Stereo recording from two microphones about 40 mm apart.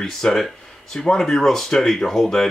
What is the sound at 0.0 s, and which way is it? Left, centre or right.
Speech, centre.